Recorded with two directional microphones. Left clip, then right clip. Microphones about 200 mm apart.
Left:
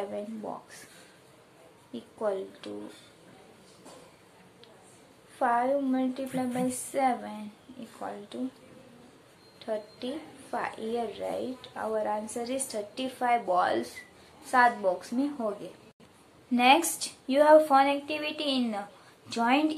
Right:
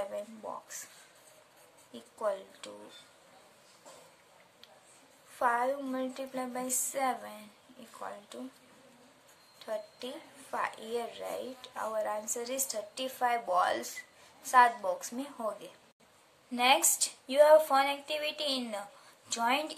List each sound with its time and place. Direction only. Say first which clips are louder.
1.9 s speech: left 3 dB; 25° right (ahead or behind)
5.4 s speech: left 4 dB; 30° right (ahead or behind)
9.6 s speech: left 4 dB; 30° right (ahead or behind)
16.5 s speech: left 4 dB; 20° right (ahead or behind)